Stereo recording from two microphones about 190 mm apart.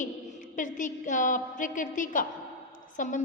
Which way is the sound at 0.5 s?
45° left (ahead or behind).